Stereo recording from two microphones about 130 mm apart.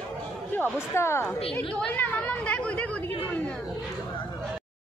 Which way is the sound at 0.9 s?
20° left (ahead or behind).